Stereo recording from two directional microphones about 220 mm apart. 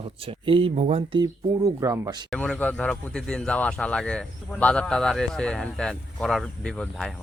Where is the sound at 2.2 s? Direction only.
5° left (ahead or behind).